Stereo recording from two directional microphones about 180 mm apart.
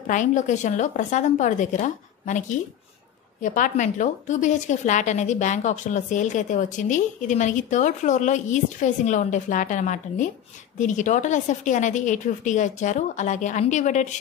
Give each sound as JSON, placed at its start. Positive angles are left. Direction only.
{"t": 0.0, "sound": "a woman's voice", "side_deg": 45}
{"t": 3.4, "sound": "a woman's voice", "side_deg": 45}